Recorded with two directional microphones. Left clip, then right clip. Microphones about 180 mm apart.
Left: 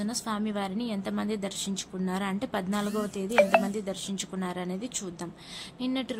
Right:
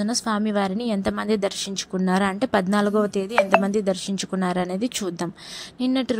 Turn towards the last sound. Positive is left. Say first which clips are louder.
# right 8 dB
turn(degrees=-40)  # may be behind; listen again after turning